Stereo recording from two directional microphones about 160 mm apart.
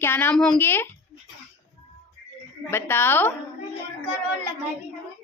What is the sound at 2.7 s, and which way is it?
Speech, 15° left (ahead or behind).